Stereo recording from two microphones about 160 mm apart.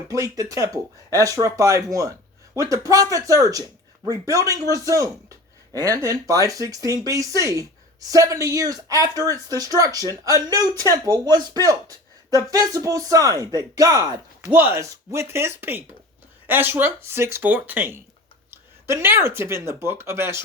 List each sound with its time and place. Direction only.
0.1 s speech: 20° right (ahead or behind)